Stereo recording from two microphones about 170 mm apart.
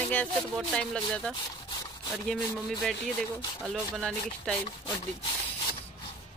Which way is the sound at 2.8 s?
Centre (ahead or behind).